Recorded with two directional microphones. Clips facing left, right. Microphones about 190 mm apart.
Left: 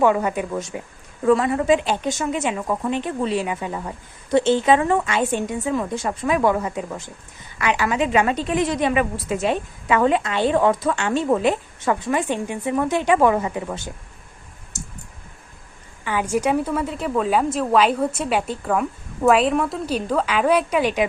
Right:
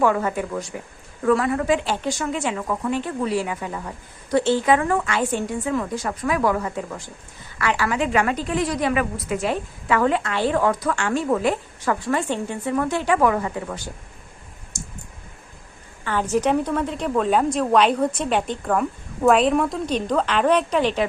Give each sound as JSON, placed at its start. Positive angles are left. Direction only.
{"t": 0.0, "sound": "a woman's voice", "side_deg": 15}
{"t": 14.7, "sound": "clicking", "side_deg": -15}
{"t": 16.0, "sound": "a woman's voice", "side_deg": 10}